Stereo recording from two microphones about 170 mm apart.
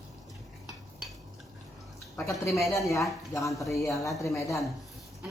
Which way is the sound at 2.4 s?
15° left (ahead or behind).